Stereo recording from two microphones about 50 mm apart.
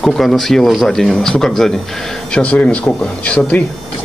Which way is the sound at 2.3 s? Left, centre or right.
Left.